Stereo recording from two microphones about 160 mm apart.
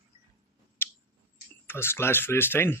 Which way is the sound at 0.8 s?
15° left (ahead or behind).